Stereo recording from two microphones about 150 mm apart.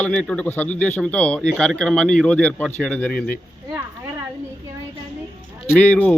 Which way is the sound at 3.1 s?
75° left (ahead or behind).